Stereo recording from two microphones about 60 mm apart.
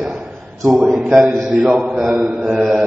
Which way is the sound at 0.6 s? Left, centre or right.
Centre.